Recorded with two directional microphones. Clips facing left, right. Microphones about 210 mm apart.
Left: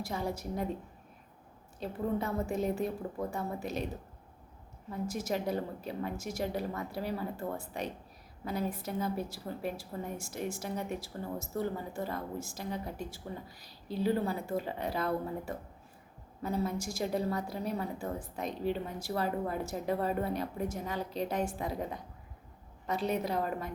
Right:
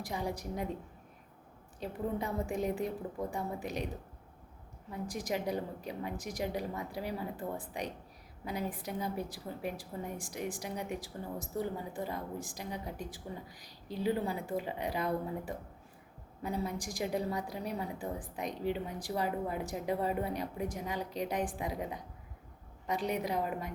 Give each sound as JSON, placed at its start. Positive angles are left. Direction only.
{"t": 0.0, "sound": "a woman's voice", "side_deg": -15}
{"t": 1.8, "sound": "a woman's voice", "side_deg": -15}
{"t": 4.9, "sound": "a woman's voice", "side_deg": -15}